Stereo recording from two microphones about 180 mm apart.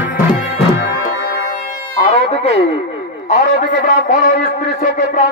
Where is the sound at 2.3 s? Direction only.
35° left (ahead or behind).